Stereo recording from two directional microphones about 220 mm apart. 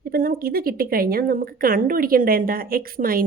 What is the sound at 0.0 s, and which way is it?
A woman's voice, 40° right (ahead or behind).